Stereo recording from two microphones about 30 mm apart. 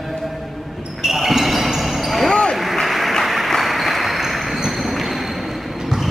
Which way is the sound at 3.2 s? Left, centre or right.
Centre.